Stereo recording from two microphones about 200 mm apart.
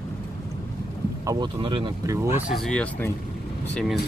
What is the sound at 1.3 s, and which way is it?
Speech, 20° right (ahead or behind).